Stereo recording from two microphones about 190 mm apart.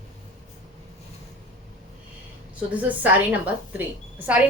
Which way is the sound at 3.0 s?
10° right (ahead or behind).